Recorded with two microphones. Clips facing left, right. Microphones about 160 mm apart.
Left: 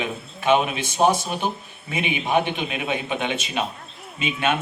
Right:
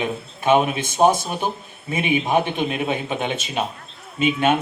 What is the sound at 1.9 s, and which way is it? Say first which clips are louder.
Speech: right 3 dB; 45° right (ahead or behind).